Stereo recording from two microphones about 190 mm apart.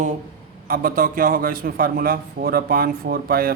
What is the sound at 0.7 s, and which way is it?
A man's voice, 50° right (ahead or behind).